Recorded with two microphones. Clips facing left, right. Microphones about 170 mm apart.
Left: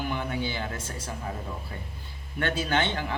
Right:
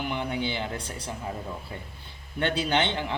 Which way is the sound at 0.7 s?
65° right (ahead or behind).